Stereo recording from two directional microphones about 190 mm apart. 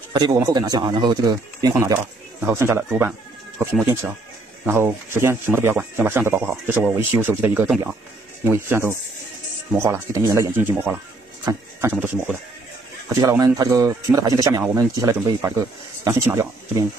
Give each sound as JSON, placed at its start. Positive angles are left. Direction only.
{"t": 0.1, "sound": "a man's voice", "side_deg": -20}
{"t": 11.9, "sound": "speech", "side_deg": -5}
{"t": 13.1, "sound": "speech", "side_deg": -15}